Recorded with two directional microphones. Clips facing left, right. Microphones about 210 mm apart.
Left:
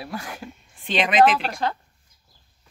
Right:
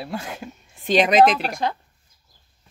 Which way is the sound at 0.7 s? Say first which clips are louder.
Right 3 dB; 40° right (ahead or behind).